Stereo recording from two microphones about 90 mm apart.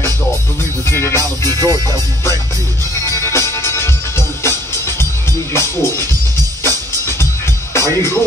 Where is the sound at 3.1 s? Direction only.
30° left (ahead or behind).